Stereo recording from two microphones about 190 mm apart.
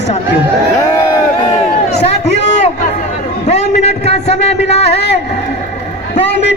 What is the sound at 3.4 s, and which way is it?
A man's voice, 35° left (ahead or behind).